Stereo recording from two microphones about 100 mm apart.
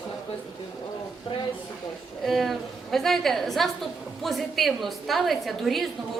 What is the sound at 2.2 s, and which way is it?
A woman's voice, centre (ahead or behind).